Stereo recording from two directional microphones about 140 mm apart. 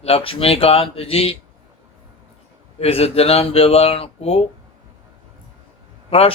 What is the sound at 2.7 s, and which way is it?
Speech, 45° left (ahead or behind).